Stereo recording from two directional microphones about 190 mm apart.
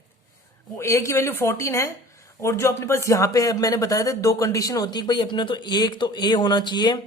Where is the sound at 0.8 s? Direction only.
15° left (ahead or behind).